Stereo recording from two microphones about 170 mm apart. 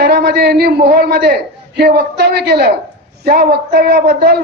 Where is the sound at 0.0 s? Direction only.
70° right (ahead or behind).